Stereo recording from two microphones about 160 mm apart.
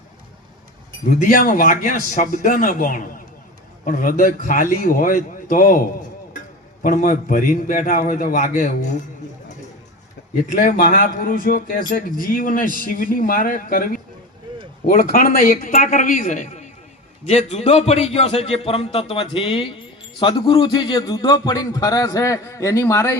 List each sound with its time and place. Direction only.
1.1 s speech: 60° left (ahead or behind)
6.8 s speech: 50° left (ahead or behind)
10.5 s speech: 60° left (ahead or behind)
14.5 s a sound: 30° right (ahead or behind)
15.1 s speech: 65° left (ahead or behind)
15.7 s a man's voice: 45° left (ahead or behind); by 23.1 s 20° left (ahead or behind)